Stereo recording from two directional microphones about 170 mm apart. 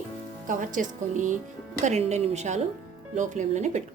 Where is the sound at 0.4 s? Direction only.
50° right (ahead or behind).